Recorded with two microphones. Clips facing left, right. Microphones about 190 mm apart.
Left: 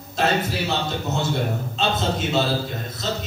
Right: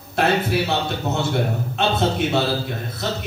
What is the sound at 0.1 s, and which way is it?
Speech, 60° right (ahead or behind).